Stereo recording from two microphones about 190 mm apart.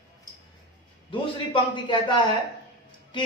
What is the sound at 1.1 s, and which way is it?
A man's voice, 25° left (ahead or behind).